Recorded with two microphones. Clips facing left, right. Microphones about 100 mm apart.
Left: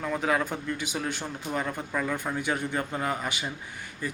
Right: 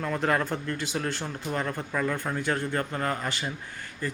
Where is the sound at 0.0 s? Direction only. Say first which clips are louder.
Right 1 dB; 5° left (ahead or behind).